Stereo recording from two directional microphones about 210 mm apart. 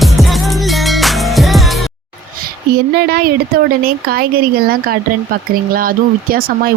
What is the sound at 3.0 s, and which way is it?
Speech, 50° right (ahead or behind).